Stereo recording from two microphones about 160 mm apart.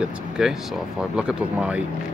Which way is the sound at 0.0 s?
5° right (ahead or behind).